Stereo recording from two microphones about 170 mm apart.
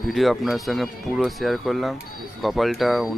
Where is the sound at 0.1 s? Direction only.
Centre (ahead or behind).